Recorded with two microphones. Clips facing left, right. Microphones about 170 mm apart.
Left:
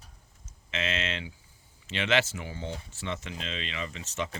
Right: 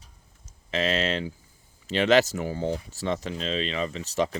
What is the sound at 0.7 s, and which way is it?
Speech, 35° right (ahead or behind).